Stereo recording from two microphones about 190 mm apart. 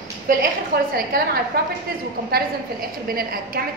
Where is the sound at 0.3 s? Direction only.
45° right (ahead or behind).